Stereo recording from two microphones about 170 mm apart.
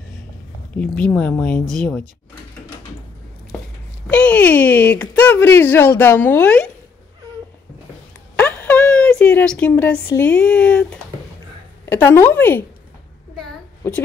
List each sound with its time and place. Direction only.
0.7 s speech: 5° left (ahead or behind)
4.1 s speech: 10° left (ahead or behind)
8.4 s a sound: 10° left (ahead or behind)
10.0 s speech: 15° left (ahead or behind)
13.8 s speech: 10° left (ahead or behind)